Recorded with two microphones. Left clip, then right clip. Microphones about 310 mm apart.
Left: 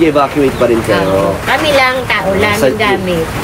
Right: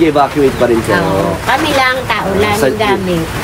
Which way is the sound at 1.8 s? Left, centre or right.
Right.